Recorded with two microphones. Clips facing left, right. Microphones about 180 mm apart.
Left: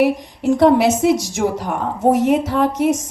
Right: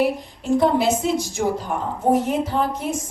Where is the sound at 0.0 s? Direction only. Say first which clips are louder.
Left 5 dB; 85° left.